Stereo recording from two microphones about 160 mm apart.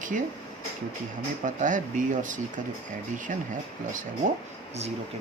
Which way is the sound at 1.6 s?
50° right (ahead or behind).